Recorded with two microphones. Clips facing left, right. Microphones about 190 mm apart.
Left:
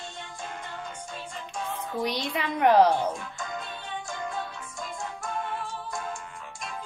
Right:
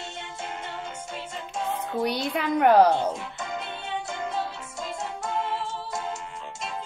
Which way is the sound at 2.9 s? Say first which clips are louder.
Right 2 dB; 25° right (ahead or behind).